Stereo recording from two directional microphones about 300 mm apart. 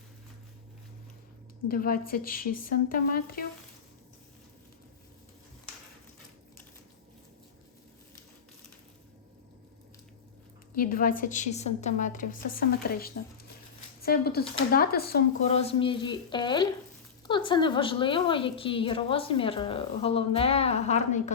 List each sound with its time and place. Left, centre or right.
1.6 s a woman's voice: left
10.8 s a woman's voice: left